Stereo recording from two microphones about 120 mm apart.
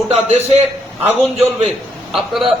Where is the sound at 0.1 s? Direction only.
60° right (ahead or behind).